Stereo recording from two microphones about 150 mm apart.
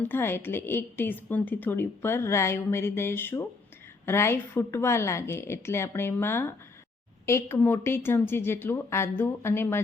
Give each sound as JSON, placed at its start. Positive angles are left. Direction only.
{"t": 0.0, "sound": "a woman's voice", "side_deg": 15}